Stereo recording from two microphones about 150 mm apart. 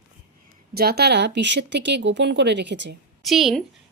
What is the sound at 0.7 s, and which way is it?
Speech, 90° right.